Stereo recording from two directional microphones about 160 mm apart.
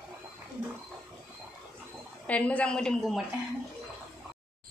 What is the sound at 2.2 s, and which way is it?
A woman's voice, 10° left (ahead or behind).